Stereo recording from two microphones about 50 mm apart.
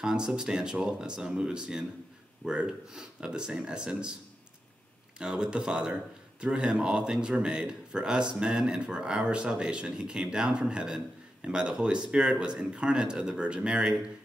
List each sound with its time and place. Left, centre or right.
0.0 s speech: centre
5.2 s speech: centre